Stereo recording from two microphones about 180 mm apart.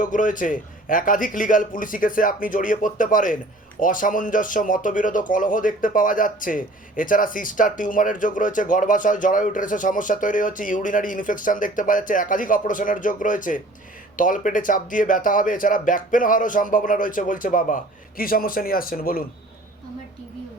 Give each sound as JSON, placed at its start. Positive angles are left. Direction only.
{"t": 0.0, "sound": "speech", "side_deg": 45}